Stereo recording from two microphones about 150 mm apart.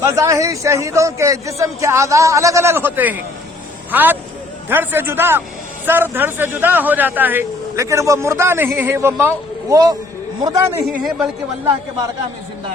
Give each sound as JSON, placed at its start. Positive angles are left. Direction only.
{"t": 0.0, "sound": "a man's voice", "side_deg": -20}